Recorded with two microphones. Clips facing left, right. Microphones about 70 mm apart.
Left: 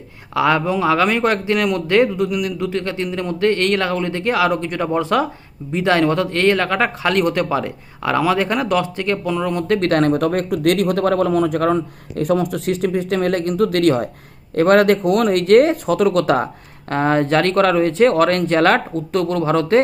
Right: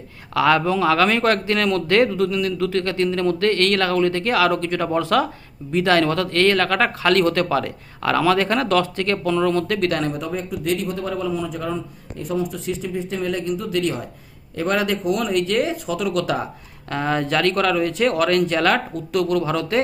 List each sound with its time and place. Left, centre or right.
0.3 s speech: left
9.6 s speech: left